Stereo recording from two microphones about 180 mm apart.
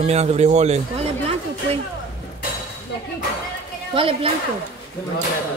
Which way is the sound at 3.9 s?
30° right (ahead or behind).